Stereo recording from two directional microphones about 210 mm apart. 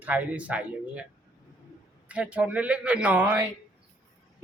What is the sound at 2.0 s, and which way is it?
A woman's voice, 5° right (ahead or behind).